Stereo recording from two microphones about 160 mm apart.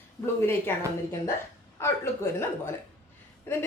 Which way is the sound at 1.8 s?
15° left (ahead or behind).